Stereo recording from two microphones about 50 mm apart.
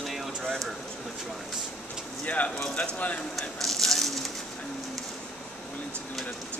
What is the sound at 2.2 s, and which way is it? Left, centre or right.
Speech, left.